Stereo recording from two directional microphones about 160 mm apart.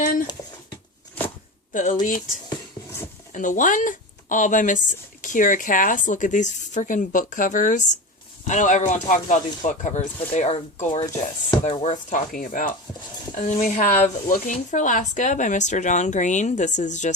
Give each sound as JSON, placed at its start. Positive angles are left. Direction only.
{"t": 0.0, "sound": "a sound", "side_deg": 60}
{"t": 1.7, "sound": "speech", "side_deg": 55}
{"t": 3.3, "sound": "a woman's voice", "side_deg": 55}